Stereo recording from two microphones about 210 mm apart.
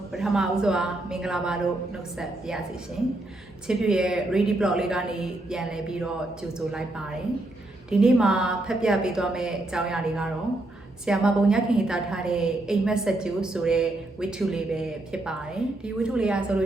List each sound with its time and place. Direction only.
0.1 s a woman's voice: centre (ahead or behind)
3.7 s a woman's voice: 5° right (ahead or behind)
7.9 s a woman's voice: 5° right (ahead or behind)